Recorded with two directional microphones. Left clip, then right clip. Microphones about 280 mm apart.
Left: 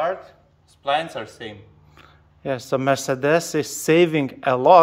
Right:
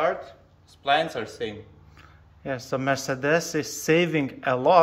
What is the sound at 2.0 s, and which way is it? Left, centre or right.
A man's voice, left.